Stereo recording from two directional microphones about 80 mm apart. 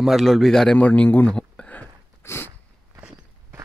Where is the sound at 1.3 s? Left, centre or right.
Centre.